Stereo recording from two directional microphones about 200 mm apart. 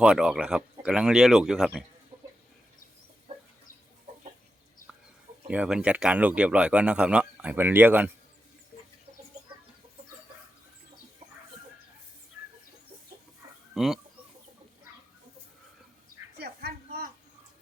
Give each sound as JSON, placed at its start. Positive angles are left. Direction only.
{"t": 0.0, "sound": "speech", "side_deg": -5}
{"t": 3.3, "sound": "chicken", "side_deg": -25}
{"t": 5.5, "sound": "speech", "side_deg": -5}
{"t": 13.7, "sound": "speech", "side_deg": 0}
{"t": 16.4, "sound": "a sound", "side_deg": -55}